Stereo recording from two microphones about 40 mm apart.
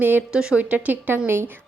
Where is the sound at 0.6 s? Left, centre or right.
Right.